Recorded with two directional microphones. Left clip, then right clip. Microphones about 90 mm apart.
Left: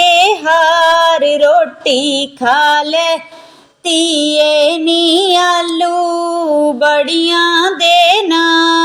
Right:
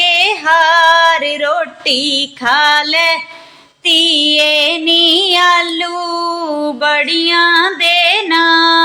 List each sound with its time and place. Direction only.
0.0 s female singing: 45° left (ahead or behind)
3.8 s child singing: 45° left (ahead or behind)
6.7 s female singing: 40° left (ahead or behind)
7.5 s child singing: 40° left (ahead or behind)